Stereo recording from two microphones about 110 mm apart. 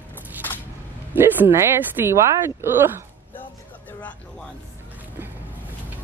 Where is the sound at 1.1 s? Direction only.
20° right (ahead or behind).